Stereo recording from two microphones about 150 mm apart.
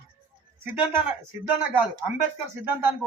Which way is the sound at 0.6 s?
10° right (ahead or behind).